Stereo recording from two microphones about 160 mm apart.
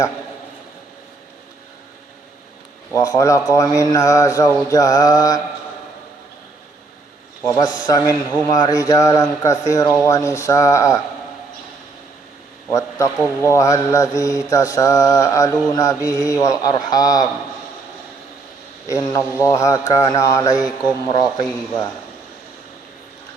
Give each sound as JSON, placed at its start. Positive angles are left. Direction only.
{"t": 2.9, "sound": "mantra", "side_deg": 20}
{"t": 7.4, "sound": "mantra", "side_deg": 25}
{"t": 13.4, "sound": "mantra", "side_deg": 20}
{"t": 18.9, "sound": "mantra", "side_deg": 20}